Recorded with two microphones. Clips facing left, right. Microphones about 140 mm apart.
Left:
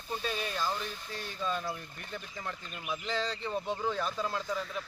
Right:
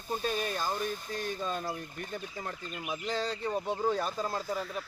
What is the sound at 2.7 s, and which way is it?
Speech, 15° right (ahead or behind).